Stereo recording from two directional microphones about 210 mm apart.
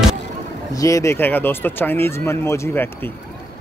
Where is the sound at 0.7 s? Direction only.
15° left (ahead or behind).